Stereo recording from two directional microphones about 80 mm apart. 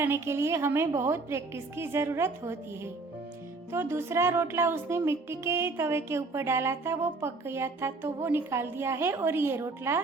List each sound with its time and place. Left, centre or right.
0.0 s music: right